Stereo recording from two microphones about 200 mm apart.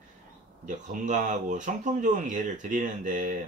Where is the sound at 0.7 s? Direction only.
40° right (ahead or behind).